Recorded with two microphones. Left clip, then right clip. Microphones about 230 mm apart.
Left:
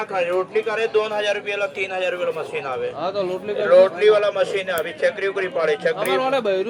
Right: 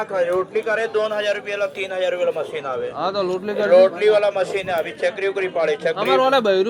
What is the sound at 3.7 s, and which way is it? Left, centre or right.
A man's voice, centre.